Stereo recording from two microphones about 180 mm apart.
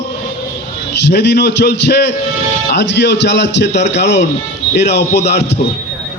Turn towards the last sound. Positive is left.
turn(degrees=65)  # may be behind; listen again after turning